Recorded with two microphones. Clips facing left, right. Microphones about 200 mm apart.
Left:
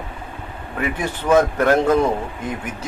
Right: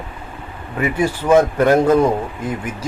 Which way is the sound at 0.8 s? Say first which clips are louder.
Right 5 dB; 10° right (ahead or behind).